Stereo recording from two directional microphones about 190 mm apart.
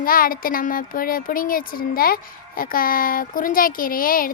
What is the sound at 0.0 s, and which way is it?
A woman's voice, 50° left (ahead or behind).